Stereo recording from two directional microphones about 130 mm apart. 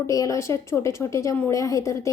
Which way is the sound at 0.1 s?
25° left (ahead or behind).